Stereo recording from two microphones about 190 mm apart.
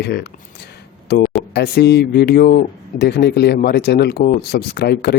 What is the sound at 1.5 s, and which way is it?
Speech, 60° left (ahead or behind).